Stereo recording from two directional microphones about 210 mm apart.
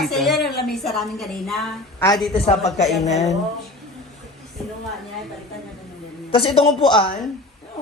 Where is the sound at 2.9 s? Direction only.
Centre (ahead or behind).